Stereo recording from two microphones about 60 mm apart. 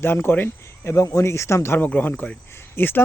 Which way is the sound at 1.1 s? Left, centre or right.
Left.